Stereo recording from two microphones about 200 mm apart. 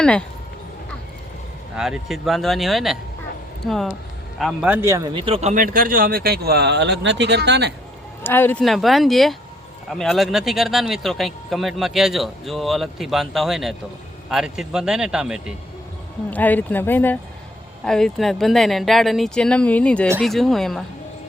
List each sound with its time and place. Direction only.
0.0 s speech: 5° left (ahead or behind)
1.7 s a man's voice: 5° right (ahead or behind); by 7.7 s 60° right (ahead or behind)
8.2 s speech: 10° left (ahead or behind)
16.3 s speech: 10° left (ahead or behind)